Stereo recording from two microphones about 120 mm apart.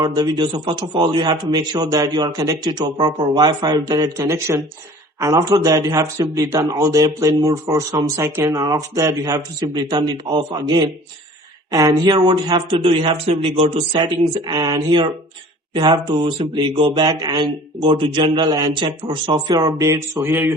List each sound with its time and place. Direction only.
0.0 s a man's voice: 35° right (ahead or behind)
19.8 s a man's voice: 20° right (ahead or behind)